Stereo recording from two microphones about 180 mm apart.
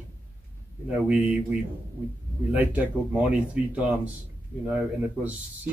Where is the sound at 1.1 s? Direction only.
10° right (ahead or behind).